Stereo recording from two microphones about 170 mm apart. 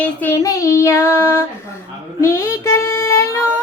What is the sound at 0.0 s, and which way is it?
Speech, 10° left (ahead or behind).